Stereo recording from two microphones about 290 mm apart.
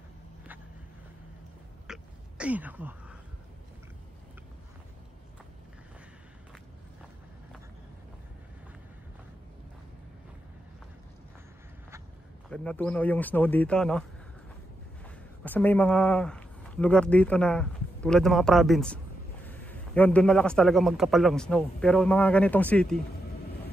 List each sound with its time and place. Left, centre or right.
1.9 s a sound: centre
12.4 s a man's voice: centre
15.0 s a man's voice: centre